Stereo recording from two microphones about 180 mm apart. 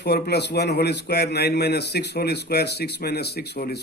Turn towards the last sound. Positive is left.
turn(degrees=60)  # may be behind; listen again after turning